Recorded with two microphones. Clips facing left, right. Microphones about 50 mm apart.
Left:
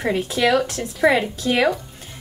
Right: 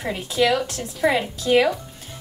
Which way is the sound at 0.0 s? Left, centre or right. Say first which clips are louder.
Left 2 dB; left.